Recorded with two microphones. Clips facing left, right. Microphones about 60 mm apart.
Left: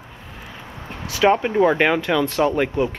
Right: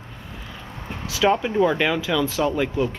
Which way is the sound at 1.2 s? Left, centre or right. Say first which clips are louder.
Left 3 dB; left.